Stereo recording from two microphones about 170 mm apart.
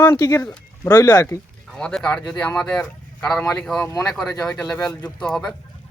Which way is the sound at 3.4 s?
20° left (ahead or behind).